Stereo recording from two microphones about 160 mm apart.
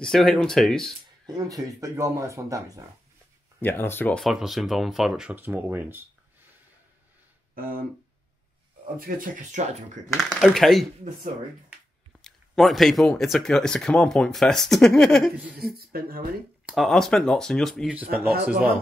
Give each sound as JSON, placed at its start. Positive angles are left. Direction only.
{"t": 0.0, "sound": "speech", "side_deg": 0}
{"t": 1.0, "sound": "speech", "side_deg": -25}
{"t": 3.6, "sound": "speech", "side_deg": 15}
{"t": 4.2, "sound": "speech", "side_deg": 0}
{"t": 8.9, "sound": "speech", "side_deg": -60}
{"t": 10.0, "sound": "speech", "side_deg": 0}
{"t": 12.2, "sound": "a sound", "side_deg": 0}
{"t": 13.2, "sound": "speech", "side_deg": 0}
{"t": 15.6, "sound": "speech", "side_deg": -70}
{"t": 16.6, "sound": "speech", "side_deg": 0}